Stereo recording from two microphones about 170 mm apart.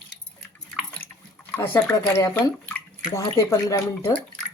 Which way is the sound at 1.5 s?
15° left (ahead or behind).